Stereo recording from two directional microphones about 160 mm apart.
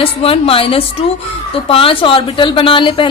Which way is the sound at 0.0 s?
35° left (ahead or behind).